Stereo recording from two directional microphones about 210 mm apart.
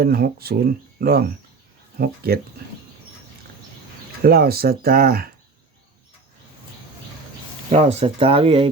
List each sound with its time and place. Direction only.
0.0 s speech: 45° right (ahead or behind)
4.2 s speech: 45° right (ahead or behind)
7.7 s speech: 30° right (ahead or behind)